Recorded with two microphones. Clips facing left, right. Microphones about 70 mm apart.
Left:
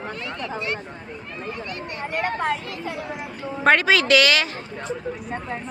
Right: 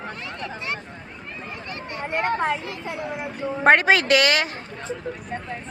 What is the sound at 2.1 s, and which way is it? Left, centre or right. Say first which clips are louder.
Speech: right 2 dB; right.